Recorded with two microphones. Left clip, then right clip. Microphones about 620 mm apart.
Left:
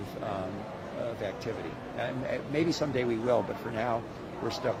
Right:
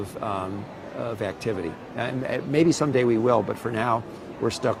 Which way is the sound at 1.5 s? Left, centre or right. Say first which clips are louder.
Right 7 dB; right.